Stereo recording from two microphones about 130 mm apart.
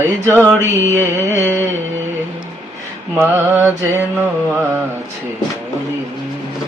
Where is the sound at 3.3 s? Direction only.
20° right (ahead or behind).